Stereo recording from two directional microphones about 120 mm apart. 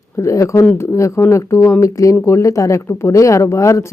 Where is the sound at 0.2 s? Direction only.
25° left (ahead or behind).